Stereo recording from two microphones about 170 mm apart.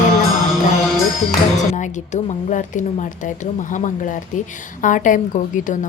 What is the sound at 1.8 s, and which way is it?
A woman's voice, 45° left (ahead or behind).